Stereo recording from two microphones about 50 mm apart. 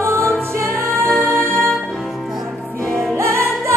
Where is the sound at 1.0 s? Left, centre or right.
Centre.